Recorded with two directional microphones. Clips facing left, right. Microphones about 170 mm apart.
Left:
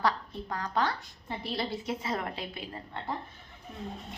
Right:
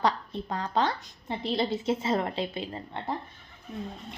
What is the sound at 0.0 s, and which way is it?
A woman's voice, 25° right (ahead or behind).